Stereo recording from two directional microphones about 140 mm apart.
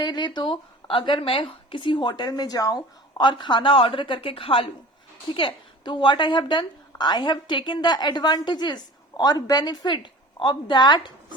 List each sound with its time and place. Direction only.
0.0 s a woman's voice: 35° left (ahead or behind)